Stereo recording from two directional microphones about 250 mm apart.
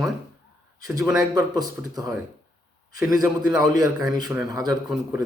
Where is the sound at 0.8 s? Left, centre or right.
Centre.